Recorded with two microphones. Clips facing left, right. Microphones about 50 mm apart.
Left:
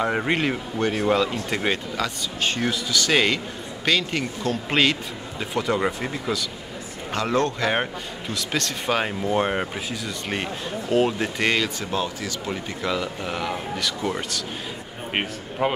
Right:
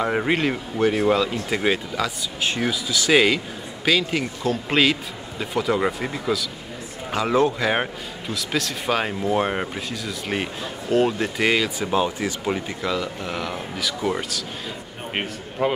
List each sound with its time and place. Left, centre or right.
0.0 s a man's voice: centre
12.2 s speech: right
12.8 s a man's voice: centre
15.6 s a man's voice: centre